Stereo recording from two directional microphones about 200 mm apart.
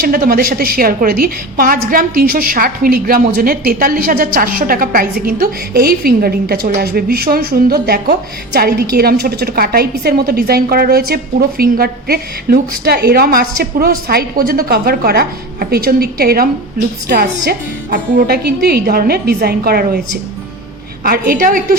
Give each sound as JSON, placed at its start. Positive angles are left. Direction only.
{"t": 0.0, "sound": "a woman's voice", "side_deg": -45}
{"t": 21.0, "sound": "a woman's voice", "side_deg": -45}